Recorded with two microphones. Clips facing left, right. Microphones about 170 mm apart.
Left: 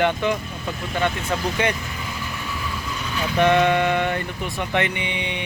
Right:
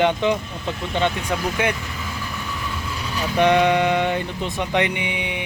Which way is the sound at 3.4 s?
15° right (ahead or behind).